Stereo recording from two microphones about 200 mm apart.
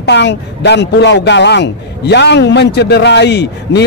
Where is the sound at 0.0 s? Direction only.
60° left (ahead or behind).